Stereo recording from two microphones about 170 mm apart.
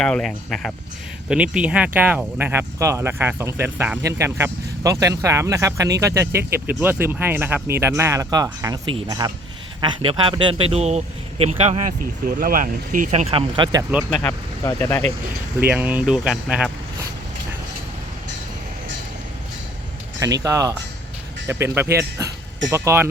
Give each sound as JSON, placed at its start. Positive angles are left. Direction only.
{"t": 0.0, "sound": "a man's voice", "side_deg": 5}
{"t": 14.6, "sound": "speech", "side_deg": 20}
{"t": 15.6, "sound": "speech", "side_deg": -10}
{"t": 20.1, "sound": "speech", "side_deg": -20}